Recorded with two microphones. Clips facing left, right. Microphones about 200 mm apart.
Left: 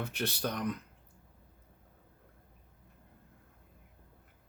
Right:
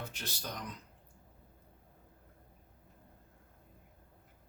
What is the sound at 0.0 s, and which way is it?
Speech, 60° left (ahead or behind).